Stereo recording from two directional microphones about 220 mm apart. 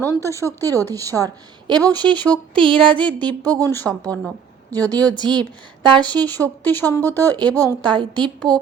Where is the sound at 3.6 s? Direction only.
10° left (ahead or behind).